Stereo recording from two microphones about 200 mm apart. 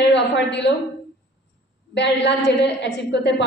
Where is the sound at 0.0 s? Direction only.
60° left (ahead or behind).